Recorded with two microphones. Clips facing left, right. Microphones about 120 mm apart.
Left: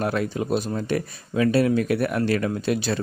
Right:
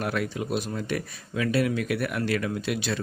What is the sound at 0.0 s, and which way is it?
Speech, 30° left (ahead or behind).